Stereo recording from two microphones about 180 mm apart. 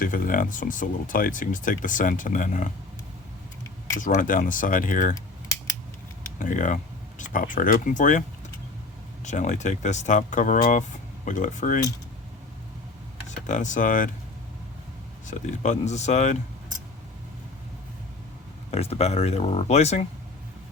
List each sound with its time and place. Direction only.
0.0 s speech: 50° left (ahead or behind)
4.0 s speech: 45° left (ahead or behind)
6.4 s speech: 45° left (ahead or behind)
9.2 s speech: 40° left (ahead or behind)
13.2 s speech: 45° left (ahead or behind)
15.3 s speech: 40° left (ahead or behind)
18.7 s speech: 35° left (ahead or behind)